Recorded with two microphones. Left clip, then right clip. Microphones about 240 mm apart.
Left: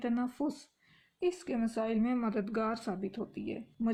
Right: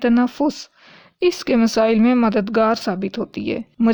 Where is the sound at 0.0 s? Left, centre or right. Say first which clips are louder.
Right 17 dB; right.